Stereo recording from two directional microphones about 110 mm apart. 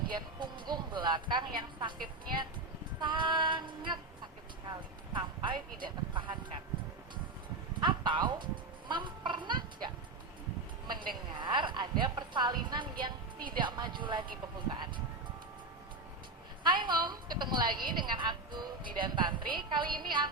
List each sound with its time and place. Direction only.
0.1 s a woman's voice: 45° right (ahead or behind)
5.1 s a woman's voice: 45° right (ahead or behind)
7.8 s speech: 45° right (ahead or behind)
8.9 s a sound: 45° right (ahead or behind)
11.3 s a woman's voice: 45° right (ahead or behind)
16.6 s a woman's voice: 45° right (ahead or behind)